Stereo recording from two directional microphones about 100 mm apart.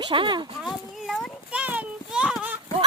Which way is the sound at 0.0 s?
55° right (ahead or behind).